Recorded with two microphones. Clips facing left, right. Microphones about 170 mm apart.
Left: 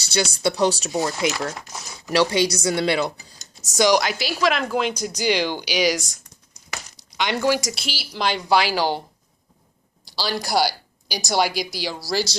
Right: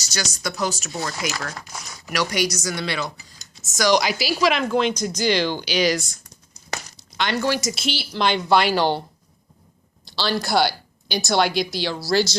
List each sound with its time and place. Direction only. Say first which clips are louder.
0.1 s a woman's voice: left 7 dB; 30° left (ahead or behind)
0.9 s a woman's voice: left 5 dB; 20° left (ahead or behind)
3.9 s speech: right 1 dB; centre (ahead or behind)
7.2 s speech: left 1 dB; 15° left (ahead or behind)
10.2 s speech: right 1 dB; 5° left (ahead or behind)